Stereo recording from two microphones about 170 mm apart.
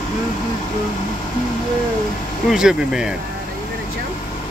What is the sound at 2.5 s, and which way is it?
Speech, 5° right (ahead or behind).